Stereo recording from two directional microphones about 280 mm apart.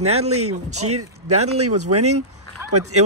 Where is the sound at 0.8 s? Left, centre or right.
Right.